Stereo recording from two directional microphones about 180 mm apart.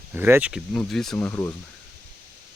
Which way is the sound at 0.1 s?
10° right (ahead or behind).